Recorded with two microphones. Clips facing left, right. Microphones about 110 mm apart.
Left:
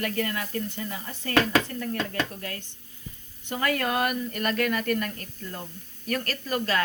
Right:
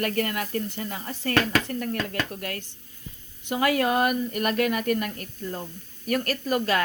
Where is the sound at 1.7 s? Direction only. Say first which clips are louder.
Right 3 dB; 45° right (ahead or behind).